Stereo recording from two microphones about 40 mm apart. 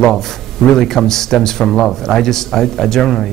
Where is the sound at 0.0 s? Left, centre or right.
Centre.